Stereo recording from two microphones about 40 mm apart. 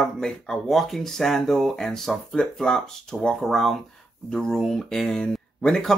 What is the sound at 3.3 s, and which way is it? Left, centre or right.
Speech, centre.